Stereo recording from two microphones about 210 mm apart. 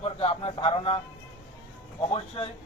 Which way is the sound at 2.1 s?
25° left (ahead or behind).